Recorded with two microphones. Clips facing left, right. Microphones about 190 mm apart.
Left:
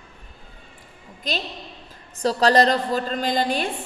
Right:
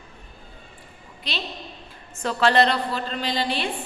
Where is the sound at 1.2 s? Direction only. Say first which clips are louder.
Left 3 dB; 45° left (ahead or behind).